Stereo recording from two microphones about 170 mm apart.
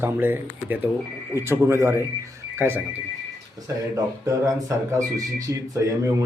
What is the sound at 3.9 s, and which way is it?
Speech, 20° right (ahead or behind).